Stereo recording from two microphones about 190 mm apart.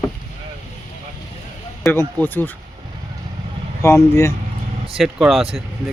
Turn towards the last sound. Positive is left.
turn(degrees=0)  # may be behind; listen again after turning